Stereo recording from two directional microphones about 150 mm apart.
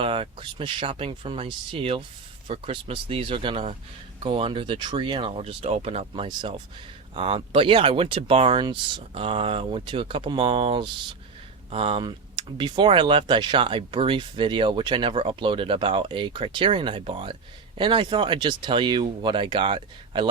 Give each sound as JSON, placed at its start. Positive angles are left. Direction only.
{"t": 0.0, "sound": "speech", "side_deg": -35}
{"t": 6.2, "sound": "speech", "side_deg": -35}